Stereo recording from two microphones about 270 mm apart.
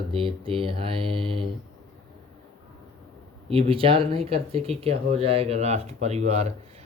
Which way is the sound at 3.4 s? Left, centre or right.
Right.